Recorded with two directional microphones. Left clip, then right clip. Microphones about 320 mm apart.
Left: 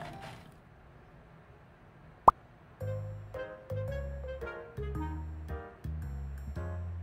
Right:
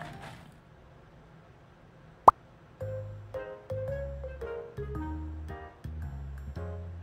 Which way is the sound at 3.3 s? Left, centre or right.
Centre.